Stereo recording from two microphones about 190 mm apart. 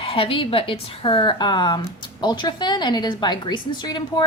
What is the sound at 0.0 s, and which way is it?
A woman's voice, 30° left (ahead or behind).